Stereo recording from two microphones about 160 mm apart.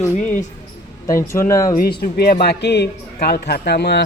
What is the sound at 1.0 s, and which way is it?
Speech, 20° left (ahead or behind).